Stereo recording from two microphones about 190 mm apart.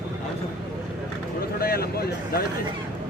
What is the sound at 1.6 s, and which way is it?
Speech, 55° left (ahead or behind).